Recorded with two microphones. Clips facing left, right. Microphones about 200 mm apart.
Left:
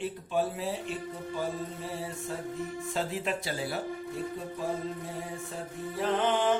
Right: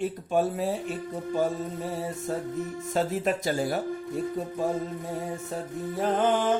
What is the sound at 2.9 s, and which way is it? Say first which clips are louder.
Speech: right 7 dB; 45° right (ahead or behind).